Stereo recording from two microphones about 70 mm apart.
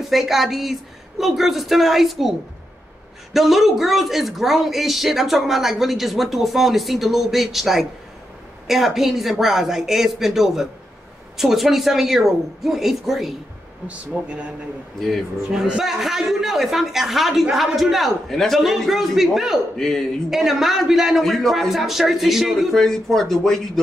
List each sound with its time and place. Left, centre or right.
0.0 s speech: centre
3.3 s speech: centre
13.8 s speech: centre
15.0 s speech: centre
20.2 s speech: centre